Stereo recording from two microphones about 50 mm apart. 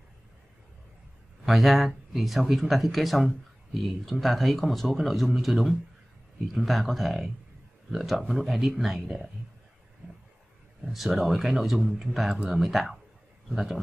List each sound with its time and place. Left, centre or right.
1.4 s speech: centre
10.9 s a man's voice: centre